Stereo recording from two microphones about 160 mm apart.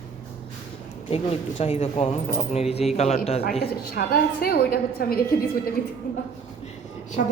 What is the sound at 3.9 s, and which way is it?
A woman's voice, 70° left (ahead or behind).